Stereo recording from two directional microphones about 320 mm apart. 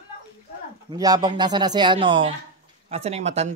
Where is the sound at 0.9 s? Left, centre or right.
Centre.